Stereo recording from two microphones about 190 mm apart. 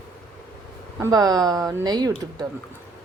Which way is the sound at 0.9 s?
20° right (ahead or behind).